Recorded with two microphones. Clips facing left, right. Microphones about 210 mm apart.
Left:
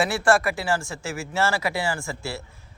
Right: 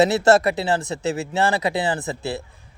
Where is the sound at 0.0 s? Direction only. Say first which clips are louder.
Right 5 dB; 20° right (ahead or behind).